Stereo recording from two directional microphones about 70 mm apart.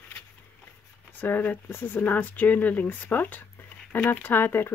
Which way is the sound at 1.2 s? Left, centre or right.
Left.